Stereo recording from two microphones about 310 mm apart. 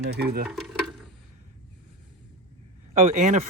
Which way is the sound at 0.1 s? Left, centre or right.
Right.